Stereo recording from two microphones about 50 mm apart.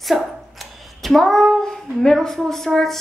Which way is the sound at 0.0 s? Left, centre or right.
Centre.